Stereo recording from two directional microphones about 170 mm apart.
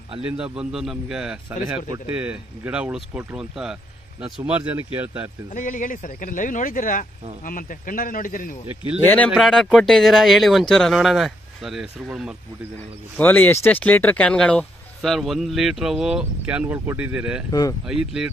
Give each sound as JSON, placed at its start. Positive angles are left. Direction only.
{"t": 0.2, "sound": "speech", "side_deg": -5}
{"t": 5.5, "sound": "speech", "side_deg": 50}
{"t": 9.3, "sound": "speech", "side_deg": 0}
{"t": 13.2, "sound": "speech", "side_deg": 10}
{"t": 17.5, "sound": "speech", "side_deg": 20}
{"t": 17.8, "sound": "speech", "side_deg": -5}